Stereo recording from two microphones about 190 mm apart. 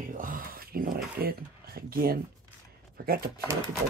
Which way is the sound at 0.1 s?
45° right (ahead or behind).